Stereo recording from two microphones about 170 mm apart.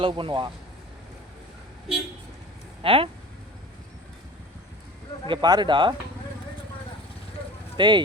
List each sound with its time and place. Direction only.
0.0 s speech: 30° right (ahead or behind)
2.8 s speech: 30° right (ahead or behind)
5.3 s speech: 25° right (ahead or behind)
7.8 s speech: 30° right (ahead or behind)